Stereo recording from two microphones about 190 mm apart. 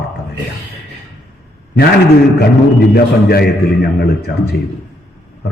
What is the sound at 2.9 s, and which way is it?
A man's voice, 55° left (ahead or behind).